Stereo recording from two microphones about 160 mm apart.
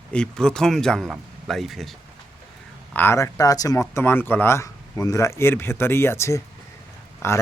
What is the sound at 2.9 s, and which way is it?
Speech, 15° left (ahead or behind).